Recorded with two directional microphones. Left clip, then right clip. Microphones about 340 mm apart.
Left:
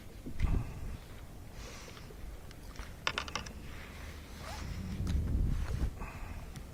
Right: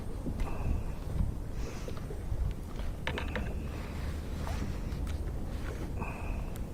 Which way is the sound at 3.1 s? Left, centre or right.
Left.